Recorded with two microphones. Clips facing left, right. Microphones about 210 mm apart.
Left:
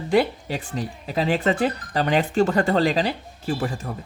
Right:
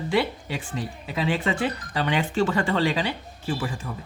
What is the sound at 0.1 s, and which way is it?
Speech, 40° left (ahead or behind).